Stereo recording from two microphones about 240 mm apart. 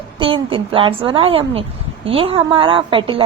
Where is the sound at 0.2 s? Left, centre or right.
Right.